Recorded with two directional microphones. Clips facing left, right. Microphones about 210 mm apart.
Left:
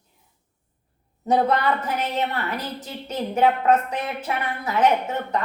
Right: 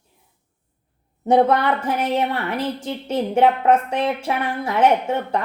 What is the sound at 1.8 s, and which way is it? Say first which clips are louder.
Speech: right 4 dB; 30° right (ahead or behind).